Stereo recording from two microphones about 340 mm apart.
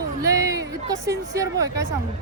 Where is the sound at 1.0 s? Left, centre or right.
Centre.